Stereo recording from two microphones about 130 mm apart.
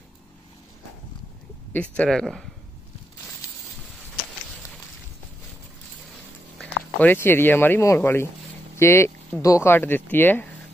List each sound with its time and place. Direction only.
1.7 s speech: 10° left (ahead or behind)
6.6 s speech: 15° left (ahead or behind)